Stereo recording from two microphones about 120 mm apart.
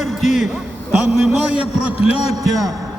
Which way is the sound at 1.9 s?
55° left (ahead or behind).